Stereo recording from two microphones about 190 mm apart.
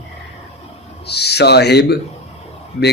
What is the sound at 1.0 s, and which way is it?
Speech, 60° left (ahead or behind).